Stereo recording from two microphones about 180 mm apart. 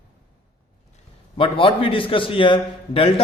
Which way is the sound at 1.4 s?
30° left (ahead or behind).